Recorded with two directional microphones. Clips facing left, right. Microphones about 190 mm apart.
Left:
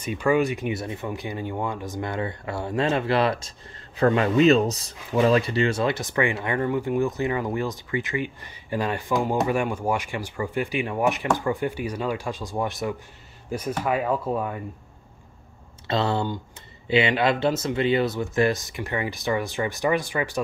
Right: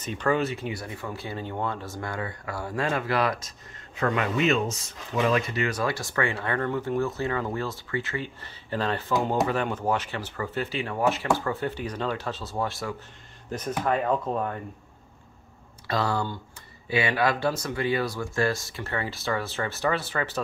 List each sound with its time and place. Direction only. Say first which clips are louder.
0.0 s speech: left 4 dB; 10° left (ahead or behind)
15.9 s speech: left 3 dB; 25° left (ahead or behind)